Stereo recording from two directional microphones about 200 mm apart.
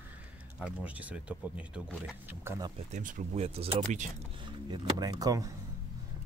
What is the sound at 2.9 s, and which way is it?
Speech, 40° right (ahead or behind).